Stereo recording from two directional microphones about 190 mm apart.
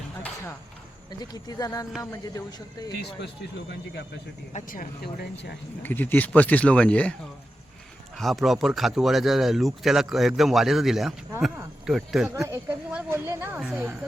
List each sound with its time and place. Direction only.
1.2 s speech: 20° left (ahead or behind)
4.5 s speech: 45° left (ahead or behind)
5.8 s speech: 10° left (ahead or behind)
8.1 s speech: centre (ahead or behind)
12.3 s speech: 15° right (ahead or behind)